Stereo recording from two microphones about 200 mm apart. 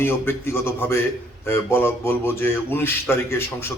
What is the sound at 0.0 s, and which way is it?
Speech, 10° left (ahead or behind).